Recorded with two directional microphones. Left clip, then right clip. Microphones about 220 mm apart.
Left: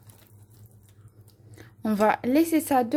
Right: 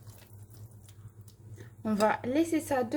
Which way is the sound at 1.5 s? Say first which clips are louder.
Left 5 dB; 40° left (ahead or behind).